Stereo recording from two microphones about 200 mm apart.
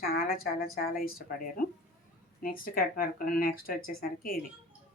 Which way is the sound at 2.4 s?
45° left (ahead or behind).